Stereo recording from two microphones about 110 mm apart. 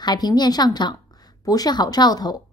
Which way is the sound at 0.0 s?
40° left (ahead or behind).